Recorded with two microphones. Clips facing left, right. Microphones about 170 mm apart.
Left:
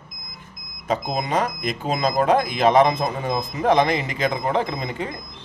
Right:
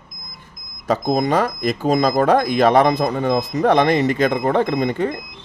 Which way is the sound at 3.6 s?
55° right (ahead or behind).